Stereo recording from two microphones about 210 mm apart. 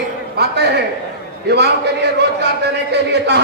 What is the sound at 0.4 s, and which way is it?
Speech, 50° right (ahead or behind).